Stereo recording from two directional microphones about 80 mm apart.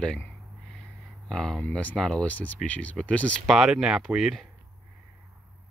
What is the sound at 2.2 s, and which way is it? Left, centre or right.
Speech, centre.